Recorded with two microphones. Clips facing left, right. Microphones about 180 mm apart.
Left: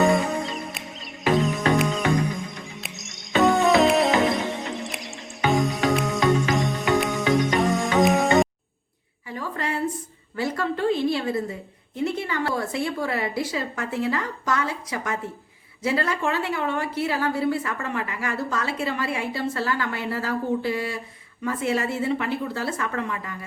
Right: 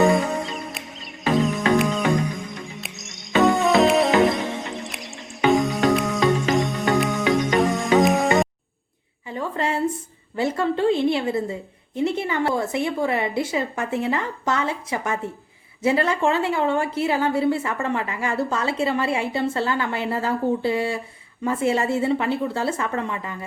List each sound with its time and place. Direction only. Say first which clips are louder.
0.0 s music: right 2 dB; centre (ahead or behind)
9.3 s a sound: right 4 dB; 25° right (ahead or behind)
10.3 s a woman's voice: right 4 dB; 25° right (ahead or behind)